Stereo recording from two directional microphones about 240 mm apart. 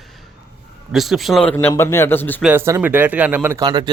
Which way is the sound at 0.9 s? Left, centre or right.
Centre.